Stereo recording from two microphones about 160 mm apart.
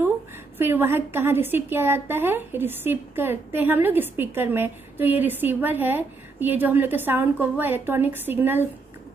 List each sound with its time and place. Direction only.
0.6 s a woman's voice: 15° right (ahead or behind)